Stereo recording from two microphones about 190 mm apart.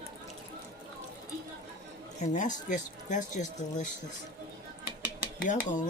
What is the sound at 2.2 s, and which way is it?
Speech, 40° left (ahead or behind).